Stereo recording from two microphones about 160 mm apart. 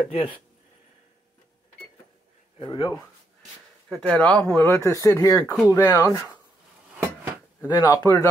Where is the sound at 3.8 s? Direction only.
5° left (ahead or behind); by 6.2 s 20° left (ahead or behind).